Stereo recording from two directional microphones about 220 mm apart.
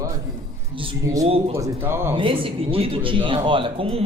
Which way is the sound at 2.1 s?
25° right (ahead or behind).